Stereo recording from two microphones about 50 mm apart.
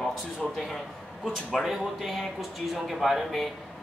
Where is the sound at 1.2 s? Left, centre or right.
Centre.